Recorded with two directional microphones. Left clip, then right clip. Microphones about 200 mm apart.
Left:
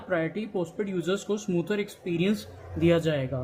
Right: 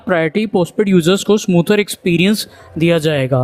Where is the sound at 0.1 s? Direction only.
50° right (ahead or behind).